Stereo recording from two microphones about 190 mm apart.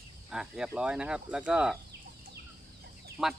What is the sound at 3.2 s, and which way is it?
Speech, 5° right (ahead or behind).